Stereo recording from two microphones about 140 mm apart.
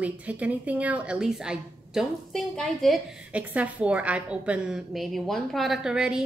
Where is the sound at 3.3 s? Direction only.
10° right (ahead or behind).